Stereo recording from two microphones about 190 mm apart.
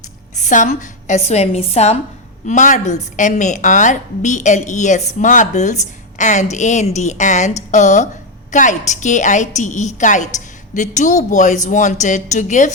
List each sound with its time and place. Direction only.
0.3 s a woman's voice: 40° left (ahead or behind)